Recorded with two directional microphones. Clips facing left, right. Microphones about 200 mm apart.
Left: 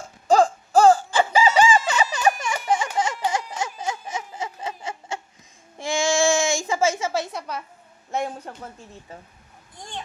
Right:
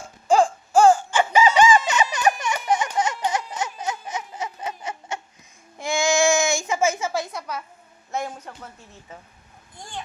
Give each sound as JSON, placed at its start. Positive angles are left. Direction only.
{"t": 0.3, "sound": "a sound", "side_deg": 40}
{"t": 5.8, "sound": "child singing", "side_deg": 30}
{"t": 8.2, "sound": "speech", "side_deg": 30}